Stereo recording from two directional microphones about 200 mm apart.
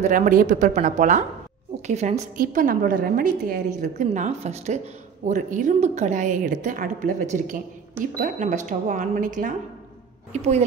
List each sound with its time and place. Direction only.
0.0 s a woman's voice: 40° right (ahead or behind)
2.3 s a woman's voice: 45° right (ahead or behind)